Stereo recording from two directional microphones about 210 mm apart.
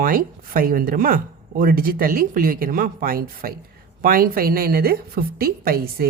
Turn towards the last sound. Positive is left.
turn(degrees=-45)  # may be behind; listen again after turning